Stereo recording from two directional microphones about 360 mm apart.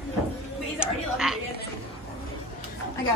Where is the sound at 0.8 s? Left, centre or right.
Centre.